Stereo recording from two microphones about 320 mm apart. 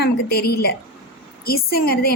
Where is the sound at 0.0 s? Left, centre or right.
Left.